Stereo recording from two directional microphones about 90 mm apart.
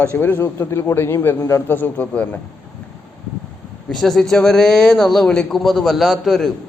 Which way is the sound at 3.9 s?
5° left (ahead or behind).